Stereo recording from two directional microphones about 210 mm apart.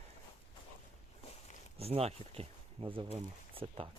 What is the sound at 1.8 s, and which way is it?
Speech, 30° right (ahead or behind).